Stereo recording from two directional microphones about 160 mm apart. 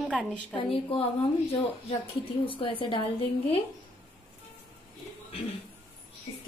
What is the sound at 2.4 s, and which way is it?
Speech, 35° left (ahead or behind).